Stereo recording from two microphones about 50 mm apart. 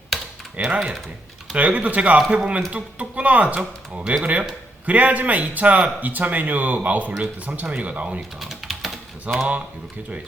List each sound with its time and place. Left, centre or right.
0.5 s speech: right
8.4 s typing: centre
9.3 s speech: right